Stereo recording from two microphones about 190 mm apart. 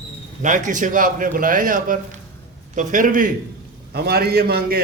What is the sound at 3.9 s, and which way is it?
Speech, 55° right (ahead or behind).